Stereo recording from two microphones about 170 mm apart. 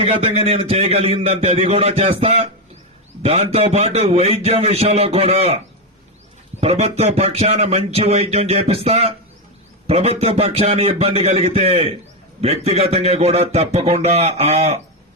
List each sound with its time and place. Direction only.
0.0 s speech: 35° right (ahead or behind)
6.6 s speech: 35° right (ahead or behind)